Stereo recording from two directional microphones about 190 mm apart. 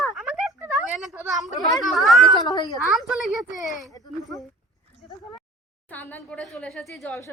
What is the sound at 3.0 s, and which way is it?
Speech, centre (ahead or behind).